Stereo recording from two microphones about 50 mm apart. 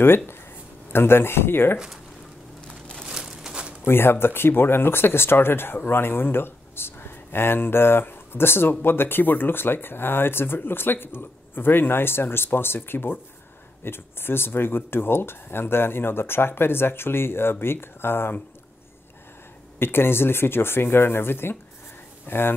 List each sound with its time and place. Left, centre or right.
0.0 s speech: left
2.7 s crumpling: centre
3.1 s crumpling: centre
3.8 s speech: left
19.8 s speech: left